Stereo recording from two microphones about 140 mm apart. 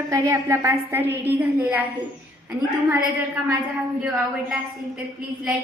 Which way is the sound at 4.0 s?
10° right (ahead or behind).